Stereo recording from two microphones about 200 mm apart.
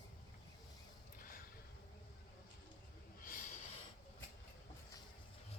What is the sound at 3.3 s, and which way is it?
Snort, 45° left (ahead or behind).